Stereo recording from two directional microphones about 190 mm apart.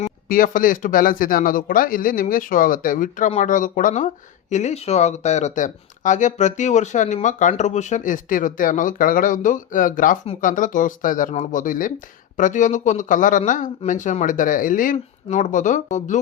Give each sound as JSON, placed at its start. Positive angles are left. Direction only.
{"t": 0.3, "sound": "a man's voice", "side_deg": 45}